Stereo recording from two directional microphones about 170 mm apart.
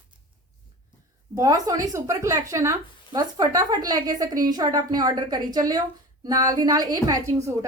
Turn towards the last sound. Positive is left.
turn(degrees=-20)  # may be behind; listen again after turning